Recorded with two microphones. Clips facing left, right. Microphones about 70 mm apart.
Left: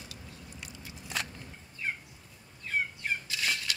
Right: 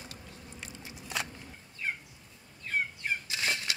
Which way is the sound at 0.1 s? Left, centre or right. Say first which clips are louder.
Even; right.